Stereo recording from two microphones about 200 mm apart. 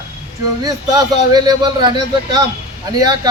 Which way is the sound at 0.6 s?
20° right (ahead or behind).